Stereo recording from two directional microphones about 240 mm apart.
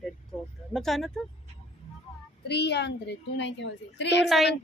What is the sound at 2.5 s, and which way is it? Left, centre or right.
A woman's voice, left.